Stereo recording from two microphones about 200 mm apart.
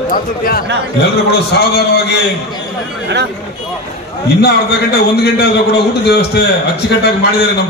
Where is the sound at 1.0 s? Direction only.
55° left (ahead or behind).